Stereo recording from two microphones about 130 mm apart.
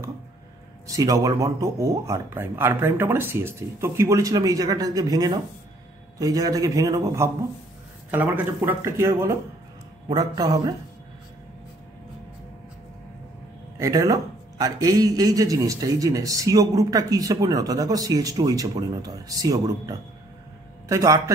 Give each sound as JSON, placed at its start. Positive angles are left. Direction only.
{"t": 0.8, "sound": "speech", "side_deg": -25}
{"t": 8.1, "sound": "a man's voice", "side_deg": -15}
{"t": 13.7, "sound": "speech", "side_deg": -25}